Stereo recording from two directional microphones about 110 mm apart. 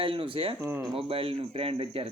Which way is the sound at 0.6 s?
30° right (ahead or behind).